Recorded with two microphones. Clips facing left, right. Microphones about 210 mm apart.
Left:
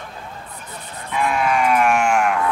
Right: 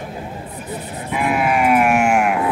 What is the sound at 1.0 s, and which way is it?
Sheep, 10° right (ahead or behind).